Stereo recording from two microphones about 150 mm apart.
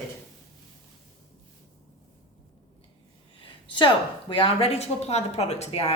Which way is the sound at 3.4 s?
35° left (ahead or behind).